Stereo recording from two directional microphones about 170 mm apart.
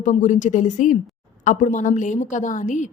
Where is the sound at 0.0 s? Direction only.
45° left (ahead or behind).